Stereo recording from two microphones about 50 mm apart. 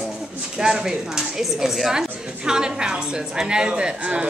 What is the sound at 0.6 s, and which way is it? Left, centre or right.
A woman's voice, centre.